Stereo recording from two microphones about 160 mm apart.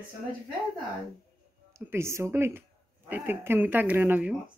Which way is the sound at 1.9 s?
15° right (ahead or behind).